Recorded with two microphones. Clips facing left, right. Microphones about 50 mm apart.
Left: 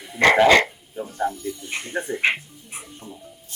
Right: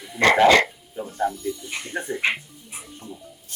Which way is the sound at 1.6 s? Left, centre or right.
Left.